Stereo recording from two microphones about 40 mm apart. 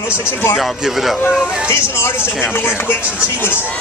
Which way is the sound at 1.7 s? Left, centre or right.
Left.